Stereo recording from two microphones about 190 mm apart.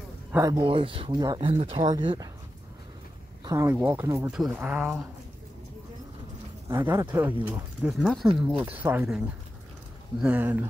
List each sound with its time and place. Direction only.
0.3 s speech: 15° right (ahead or behind)
3.4 s speech: 15° right (ahead or behind)
6.7 s speech: 15° right (ahead or behind)
10.2 s speech: 10° right (ahead or behind)